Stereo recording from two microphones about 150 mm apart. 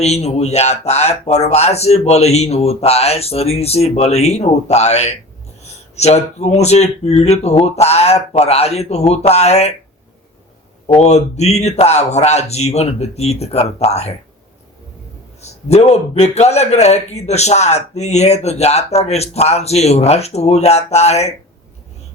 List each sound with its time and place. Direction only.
0.0 s a man's voice: 45° left (ahead or behind)
10.8 s a man's voice: 45° left (ahead or behind)
15.4 s a man's voice: 45° left (ahead or behind)